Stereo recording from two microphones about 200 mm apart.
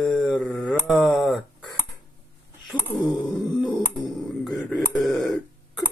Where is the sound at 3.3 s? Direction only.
Centre (ahead or behind).